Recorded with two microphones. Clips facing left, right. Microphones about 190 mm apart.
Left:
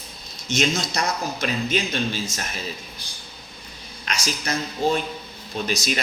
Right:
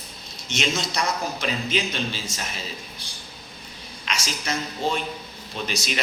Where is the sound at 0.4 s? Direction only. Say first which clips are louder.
Left 3 dB; 40° left (ahead or behind).